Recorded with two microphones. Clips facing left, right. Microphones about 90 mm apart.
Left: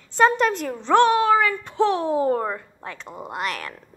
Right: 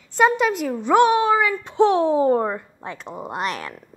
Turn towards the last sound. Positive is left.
turn(degrees=-20)  # may be behind; listen again after turning